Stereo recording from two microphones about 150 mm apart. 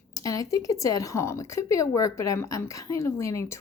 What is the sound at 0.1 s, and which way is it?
Speech, 25° left (ahead or behind).